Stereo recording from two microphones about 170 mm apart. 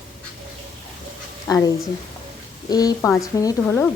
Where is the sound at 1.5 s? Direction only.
20° left (ahead or behind).